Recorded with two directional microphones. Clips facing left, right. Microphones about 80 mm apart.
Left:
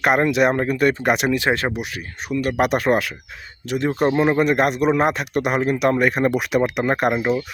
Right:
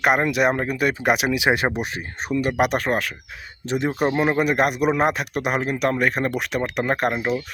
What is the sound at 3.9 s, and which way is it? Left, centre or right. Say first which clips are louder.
A man's voice: left 4 dB; centre.